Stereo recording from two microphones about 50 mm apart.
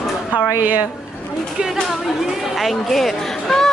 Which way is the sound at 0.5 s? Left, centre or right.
Right.